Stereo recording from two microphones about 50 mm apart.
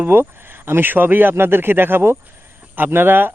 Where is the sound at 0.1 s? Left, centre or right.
Right.